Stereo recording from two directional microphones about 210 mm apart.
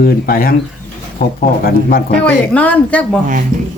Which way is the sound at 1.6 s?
45° left (ahead or behind).